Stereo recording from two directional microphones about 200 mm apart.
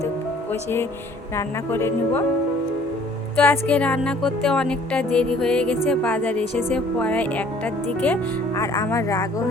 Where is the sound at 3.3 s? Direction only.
10° left (ahead or behind).